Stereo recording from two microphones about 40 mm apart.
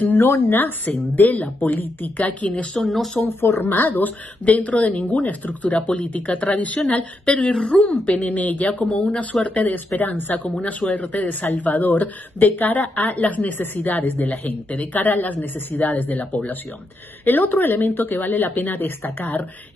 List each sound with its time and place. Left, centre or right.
0.2 s speech: left
0.8 s a woman's voice: left
2.7 s speech: centre
3.3 s speech: left
3.7 s a woman's voice: left
9.0 s a woman's voice: left
9.9 s a woman's voice: left
14.7 s a woman's voice: left